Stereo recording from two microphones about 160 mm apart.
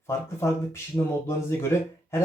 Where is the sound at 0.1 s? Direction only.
15° left (ahead or behind).